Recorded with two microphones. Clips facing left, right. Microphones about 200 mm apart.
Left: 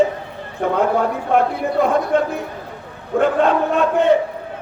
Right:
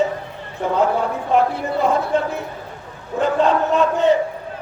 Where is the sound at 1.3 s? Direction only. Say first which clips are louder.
Left 1 dB; 55° left (ahead or behind).